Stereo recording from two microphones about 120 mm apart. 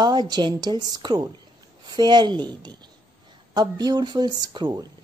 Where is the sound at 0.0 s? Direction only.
35° right (ahead or behind).